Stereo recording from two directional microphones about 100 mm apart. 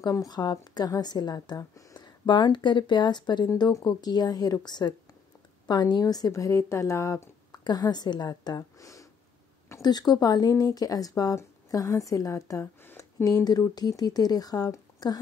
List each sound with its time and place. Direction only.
0.0 s speech: 40° left (ahead or behind)
2.2 s a woman's voice: 50° left (ahead or behind); by 7.6 s 30° left (ahead or behind)
7.6 s a woman's voice: 45° left (ahead or behind)